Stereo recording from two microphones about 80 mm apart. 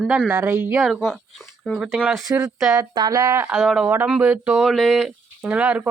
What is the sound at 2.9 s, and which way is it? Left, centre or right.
Speech, right.